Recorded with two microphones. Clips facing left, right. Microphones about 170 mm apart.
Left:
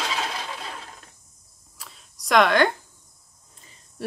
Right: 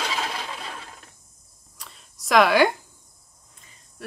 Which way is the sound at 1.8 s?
Centre (ahead or behind).